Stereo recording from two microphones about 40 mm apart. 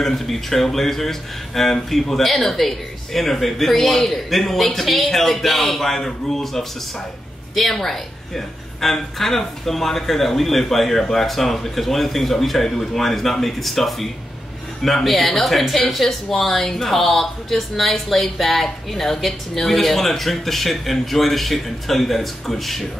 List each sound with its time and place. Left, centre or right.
0.0 s speech: centre